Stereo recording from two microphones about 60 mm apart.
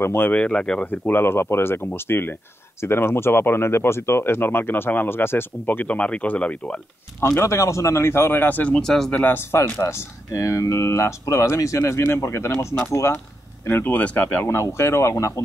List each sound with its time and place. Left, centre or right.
0.0 s speech: left
0.3 s speech: left
1.1 s speech: left
5.9 s speech: left
7.3 s speech: left
8.7 s speech: centre
9.1 s speech: left
9.8 s speech: left
12.3 s speech: left
13.7 s speech: left
13.9 s speech: left
14.4 s speech: left